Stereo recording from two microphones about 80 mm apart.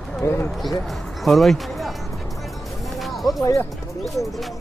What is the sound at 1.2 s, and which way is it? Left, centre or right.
Speech, centre.